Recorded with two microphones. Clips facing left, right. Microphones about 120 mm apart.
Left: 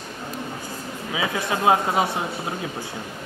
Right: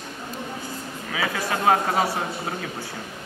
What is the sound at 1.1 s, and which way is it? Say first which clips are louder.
Speech: left 1 dB; 15° left (ahead or behind).